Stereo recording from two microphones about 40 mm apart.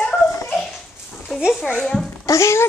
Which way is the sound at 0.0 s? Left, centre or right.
Centre.